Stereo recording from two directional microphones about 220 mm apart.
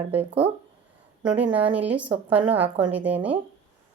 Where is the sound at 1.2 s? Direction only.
5° right (ahead or behind).